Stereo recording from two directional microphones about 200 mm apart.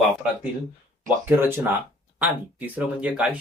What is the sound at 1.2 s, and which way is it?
Speech, 10° right (ahead or behind).